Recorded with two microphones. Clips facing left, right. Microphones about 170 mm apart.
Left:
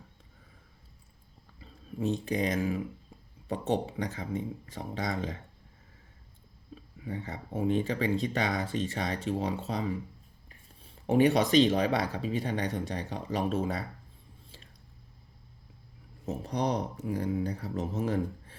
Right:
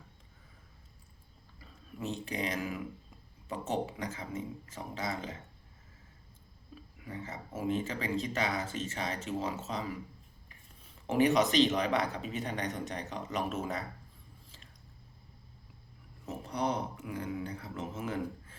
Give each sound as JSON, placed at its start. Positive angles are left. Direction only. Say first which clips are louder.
{"t": 1.5, "sound": "speech", "louder": "left 7 dB", "side_deg": 35}
{"t": 7.0, "sound": "speech", "louder": "left 4 dB", "side_deg": 30}
{"t": 16.2, "sound": "speech", "louder": "left 3 dB", "side_deg": 35}